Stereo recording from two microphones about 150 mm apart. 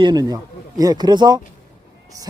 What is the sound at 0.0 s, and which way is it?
Speech, 25° right (ahead or behind).